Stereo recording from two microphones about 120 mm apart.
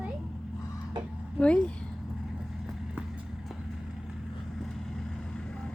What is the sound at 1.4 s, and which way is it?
Speech, 10° left (ahead or behind).